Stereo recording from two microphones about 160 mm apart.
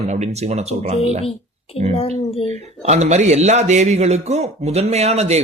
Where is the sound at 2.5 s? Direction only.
45° right (ahead or behind).